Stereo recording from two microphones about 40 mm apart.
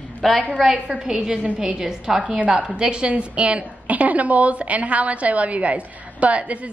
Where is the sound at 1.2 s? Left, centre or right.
Centre.